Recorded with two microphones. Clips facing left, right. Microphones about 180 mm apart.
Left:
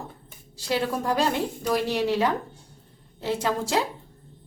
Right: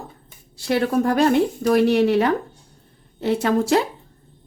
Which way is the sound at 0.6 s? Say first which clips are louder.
Right 7 dB; 60° right (ahead or behind).